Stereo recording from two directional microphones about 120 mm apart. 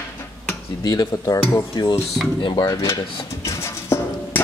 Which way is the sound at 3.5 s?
25° left (ahead or behind).